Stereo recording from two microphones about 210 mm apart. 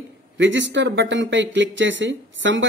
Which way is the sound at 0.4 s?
60° right (ahead or behind).